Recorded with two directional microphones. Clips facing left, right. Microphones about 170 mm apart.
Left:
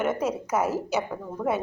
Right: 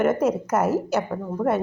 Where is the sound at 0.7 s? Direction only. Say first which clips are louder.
Right 5 dB; 40° right (ahead or behind).